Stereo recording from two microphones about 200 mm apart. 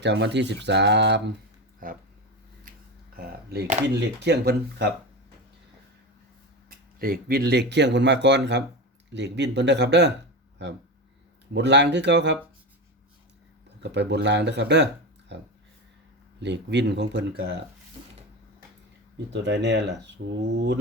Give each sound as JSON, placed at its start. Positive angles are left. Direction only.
{"t": 0.0, "sound": "speech", "side_deg": -60}
{"t": 1.8, "sound": "speech", "side_deg": -45}
{"t": 3.2, "sound": "speech", "side_deg": -55}
{"t": 7.0, "sound": "speech", "side_deg": -50}
{"t": 11.5, "sound": "speech", "side_deg": -60}
{"t": 13.8, "sound": "speech", "side_deg": -60}
{"t": 19.3, "sound": "speech", "side_deg": -60}